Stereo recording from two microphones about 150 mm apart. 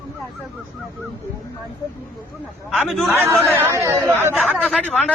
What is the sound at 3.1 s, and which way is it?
Speech, 15° right (ahead or behind).